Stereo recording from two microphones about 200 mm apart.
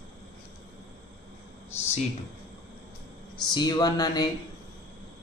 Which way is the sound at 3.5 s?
20° left (ahead or behind).